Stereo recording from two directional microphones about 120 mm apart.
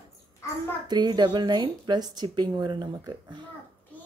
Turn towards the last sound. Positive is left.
turn(degrees=-35)  # may be behind; listen again after turning